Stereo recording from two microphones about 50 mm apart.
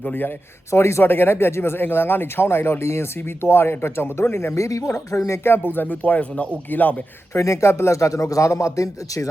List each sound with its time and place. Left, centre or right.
0.0 s speech: left
0.7 s a man's voice: left
1.0 s speech: left
4.5 s speech: left
5.4 s speech: left
7.3 s speech: left